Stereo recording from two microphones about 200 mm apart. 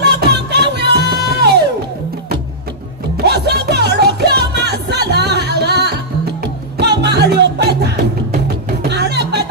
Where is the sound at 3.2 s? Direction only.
55° right (ahead or behind).